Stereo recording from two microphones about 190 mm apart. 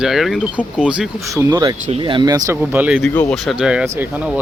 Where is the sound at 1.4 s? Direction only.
20° right (ahead or behind).